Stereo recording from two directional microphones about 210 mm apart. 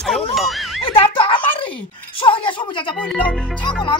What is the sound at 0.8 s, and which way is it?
Speech, 25° left (ahead or behind).